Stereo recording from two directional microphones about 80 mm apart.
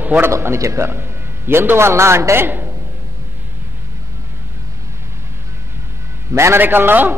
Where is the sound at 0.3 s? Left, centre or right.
Right.